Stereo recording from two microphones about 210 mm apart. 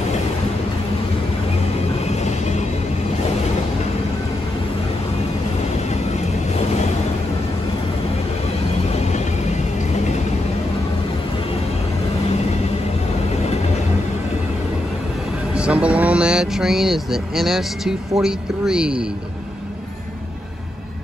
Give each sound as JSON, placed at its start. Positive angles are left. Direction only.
{"t": 8.9, "sound": "vehicle", "side_deg": 35}
{"t": 15.5, "sound": "vehicle", "side_deg": -5}
{"t": 18.2, "sound": "speech", "side_deg": -5}